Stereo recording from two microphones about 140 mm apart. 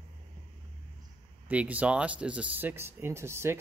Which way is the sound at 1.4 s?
10° right (ahead or behind).